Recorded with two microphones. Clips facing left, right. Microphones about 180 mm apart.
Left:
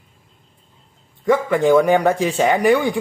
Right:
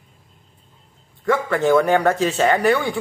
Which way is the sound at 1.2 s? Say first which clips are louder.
Left 3 dB; 15° left (ahead or behind).